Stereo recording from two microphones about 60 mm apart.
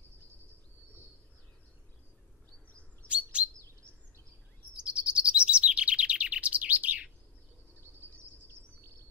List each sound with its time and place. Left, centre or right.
3.1 s chirp: centre
4.7 s chirp: centre